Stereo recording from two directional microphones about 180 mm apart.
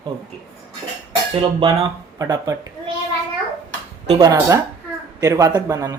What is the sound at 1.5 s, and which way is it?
Speech, 20° right (ahead or behind).